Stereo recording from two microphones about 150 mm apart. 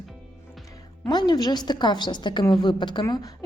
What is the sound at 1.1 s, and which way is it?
A woman's voice, 30° left (ahead or behind).